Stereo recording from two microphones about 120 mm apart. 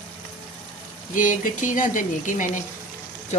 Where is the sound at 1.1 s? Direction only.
90° left.